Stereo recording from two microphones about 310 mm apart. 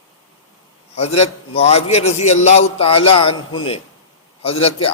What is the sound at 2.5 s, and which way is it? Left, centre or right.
Music, centre.